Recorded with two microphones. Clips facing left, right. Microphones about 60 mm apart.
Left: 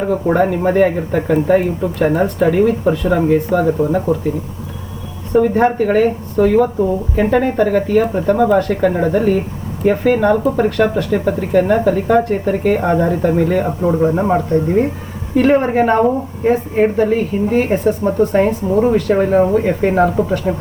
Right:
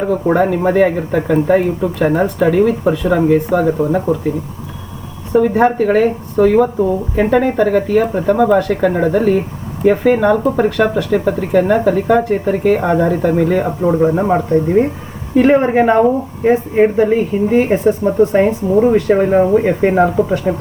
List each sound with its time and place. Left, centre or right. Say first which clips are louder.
0.3 s speech: right 1 dB; centre
5.3 s speech: right 1 dB; centre
15.5 s speech: right 2 dB; centre
16.4 s speech: right 2 dB; right
16.8 s speech: right 2 dB; centre